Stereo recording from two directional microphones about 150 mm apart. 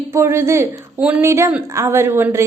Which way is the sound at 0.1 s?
15° right (ahead or behind).